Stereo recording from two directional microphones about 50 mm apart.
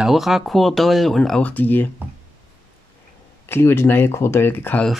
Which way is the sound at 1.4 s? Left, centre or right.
Left.